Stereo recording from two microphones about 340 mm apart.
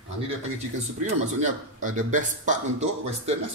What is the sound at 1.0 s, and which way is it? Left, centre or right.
A man's voice, right.